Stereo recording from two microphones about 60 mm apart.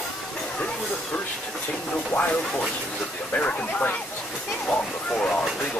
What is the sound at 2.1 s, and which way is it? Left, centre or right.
Speech, left.